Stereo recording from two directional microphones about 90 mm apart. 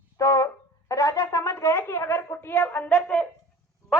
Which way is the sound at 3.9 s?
15° right (ahead or behind).